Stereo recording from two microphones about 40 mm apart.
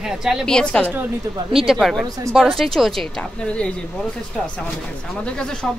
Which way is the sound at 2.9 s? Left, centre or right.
Centre.